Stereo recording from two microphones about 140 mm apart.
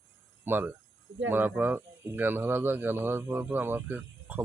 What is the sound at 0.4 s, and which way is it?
Speech, 15° right (ahead or behind).